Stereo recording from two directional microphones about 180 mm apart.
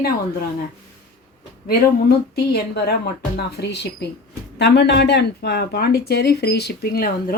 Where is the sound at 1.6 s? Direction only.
55° left (ahead or behind).